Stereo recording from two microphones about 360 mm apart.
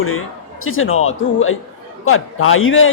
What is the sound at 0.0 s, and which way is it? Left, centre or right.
Speech, left.